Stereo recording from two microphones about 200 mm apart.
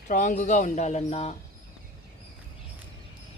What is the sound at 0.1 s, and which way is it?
Speech, 40° left (ahead or behind).